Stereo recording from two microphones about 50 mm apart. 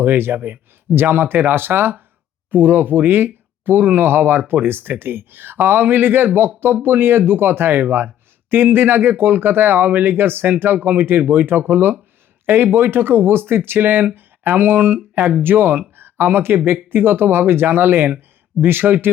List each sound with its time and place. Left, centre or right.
0.0 s speech: right
16.0 s a sound: right
16.9 s speech: right